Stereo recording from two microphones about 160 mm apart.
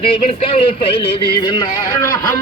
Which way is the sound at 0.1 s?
40° left (ahead or behind).